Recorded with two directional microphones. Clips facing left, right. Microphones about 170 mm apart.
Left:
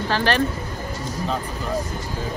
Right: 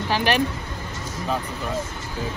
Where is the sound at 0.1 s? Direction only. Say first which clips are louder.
Even; 15° right (ahead or behind).